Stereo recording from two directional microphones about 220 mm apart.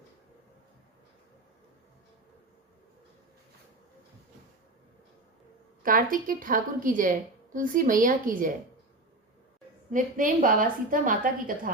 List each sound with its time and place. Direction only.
5.8 s a woman's voice: 40° right (ahead or behind)
9.9 s a woman's voice: 35° right (ahead or behind)